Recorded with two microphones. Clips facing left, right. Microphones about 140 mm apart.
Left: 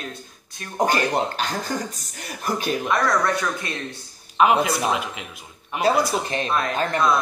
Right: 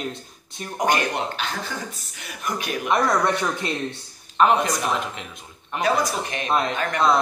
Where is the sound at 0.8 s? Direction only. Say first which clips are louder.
Left 2 dB; 35° left (ahead or behind).